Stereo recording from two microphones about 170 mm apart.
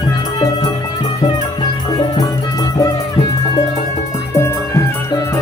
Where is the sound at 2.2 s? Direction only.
20° left (ahead or behind).